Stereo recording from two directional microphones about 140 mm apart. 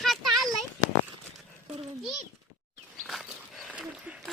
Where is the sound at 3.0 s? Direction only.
Centre (ahead or behind).